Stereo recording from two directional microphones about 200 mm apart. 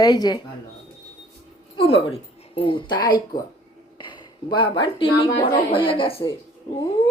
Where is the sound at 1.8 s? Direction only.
30° left (ahead or behind).